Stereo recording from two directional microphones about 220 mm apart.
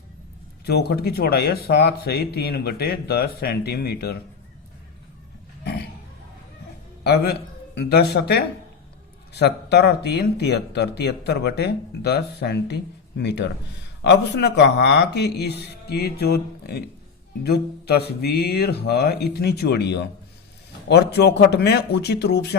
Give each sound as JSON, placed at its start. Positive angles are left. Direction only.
{"t": 0.6, "sound": "speech", "side_deg": 45}
{"t": 5.6, "sound": "a sound", "side_deg": 50}
{"t": 7.0, "sound": "speech", "side_deg": 50}